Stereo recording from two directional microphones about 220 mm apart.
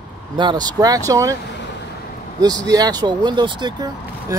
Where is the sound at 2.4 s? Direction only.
15° right (ahead or behind).